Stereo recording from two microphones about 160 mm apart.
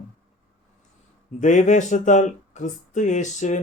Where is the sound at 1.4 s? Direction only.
50° left (ahead or behind).